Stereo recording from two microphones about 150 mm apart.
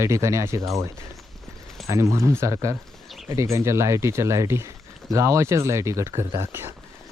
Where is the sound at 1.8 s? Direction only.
20° right (ahead or behind).